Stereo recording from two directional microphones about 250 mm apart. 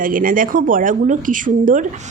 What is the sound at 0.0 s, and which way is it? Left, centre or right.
Speech, right.